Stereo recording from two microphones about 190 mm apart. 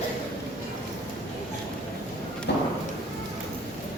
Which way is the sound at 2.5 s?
60° left (ahead or behind).